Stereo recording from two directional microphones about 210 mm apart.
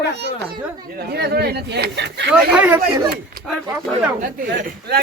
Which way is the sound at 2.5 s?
5° right (ahead or behind).